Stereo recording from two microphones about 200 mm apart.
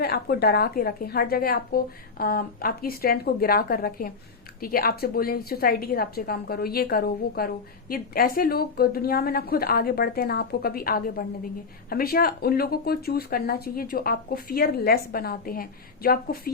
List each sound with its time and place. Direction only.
0.0 s a woman's voice: 50° left (ahead or behind)